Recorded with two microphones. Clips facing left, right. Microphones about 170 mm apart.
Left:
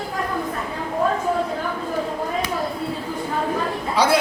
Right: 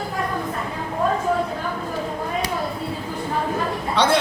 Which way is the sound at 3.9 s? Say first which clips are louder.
Left 1 dB; 5° left (ahead or behind).